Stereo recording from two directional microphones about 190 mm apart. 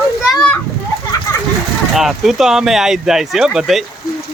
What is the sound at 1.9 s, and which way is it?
Speech, centre (ahead or behind).